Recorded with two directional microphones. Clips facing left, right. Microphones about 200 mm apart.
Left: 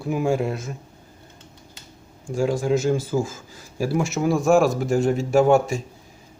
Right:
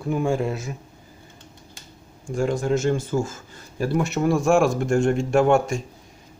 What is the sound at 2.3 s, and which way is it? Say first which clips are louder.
Speech: left 1 dB; 5° left (ahead or behind).